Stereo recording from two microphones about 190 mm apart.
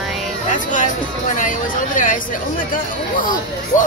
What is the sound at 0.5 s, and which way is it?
Music, 40° left (ahead or behind).